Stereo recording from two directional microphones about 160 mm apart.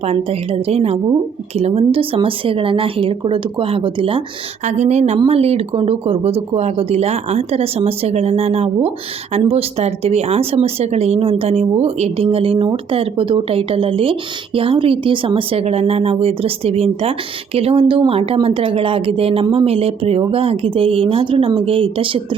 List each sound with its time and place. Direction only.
0.0 s speech: 40° right (ahead or behind)
4.6 s speech: 45° right (ahead or behind)